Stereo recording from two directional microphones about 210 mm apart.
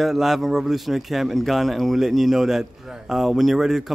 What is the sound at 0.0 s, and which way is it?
A man's voice, centre (ahead or behind).